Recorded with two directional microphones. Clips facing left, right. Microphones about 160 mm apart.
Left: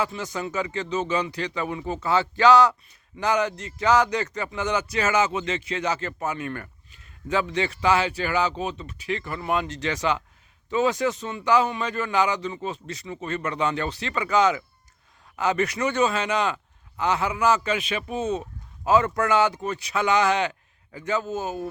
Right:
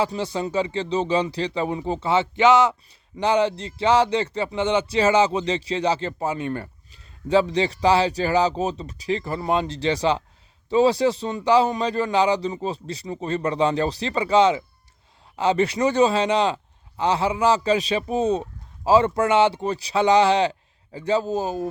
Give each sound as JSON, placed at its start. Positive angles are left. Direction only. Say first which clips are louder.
{"t": 0.0, "sound": "speech", "louder": "right 4 dB", "side_deg": -30}